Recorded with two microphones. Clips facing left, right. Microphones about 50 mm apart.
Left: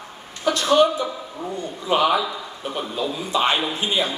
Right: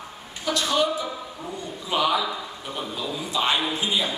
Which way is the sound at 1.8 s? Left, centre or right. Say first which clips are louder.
Left 5 dB; left.